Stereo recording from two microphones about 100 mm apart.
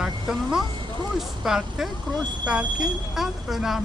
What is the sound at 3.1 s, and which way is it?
Speech, 5° right (ahead or behind).